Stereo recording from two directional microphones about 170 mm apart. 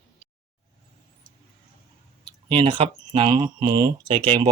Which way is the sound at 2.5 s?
30° right (ahead or behind).